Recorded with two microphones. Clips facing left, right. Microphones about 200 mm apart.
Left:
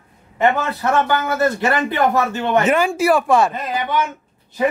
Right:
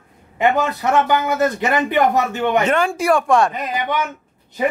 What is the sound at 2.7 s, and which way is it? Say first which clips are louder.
Speech: left 1 dB; 5° left (ahead or behind).